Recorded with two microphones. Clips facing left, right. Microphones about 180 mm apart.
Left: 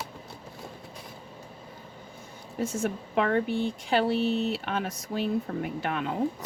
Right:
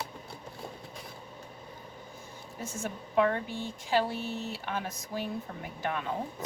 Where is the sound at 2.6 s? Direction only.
65° left (ahead or behind).